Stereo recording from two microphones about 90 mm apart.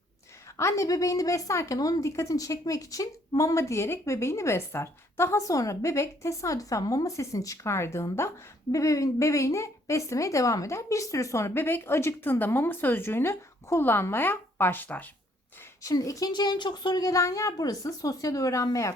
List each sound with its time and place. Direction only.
0.5 s a woman's voice: 35° left (ahead or behind)
15.8 s a woman's voice: 40° left (ahead or behind)
16.3 s a woman's voice: 55° left (ahead or behind)